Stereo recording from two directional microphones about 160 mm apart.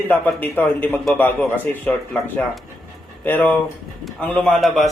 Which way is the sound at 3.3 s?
10° left (ahead or behind).